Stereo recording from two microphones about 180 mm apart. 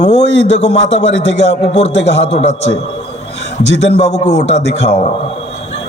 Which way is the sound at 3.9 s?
40° left (ahead or behind).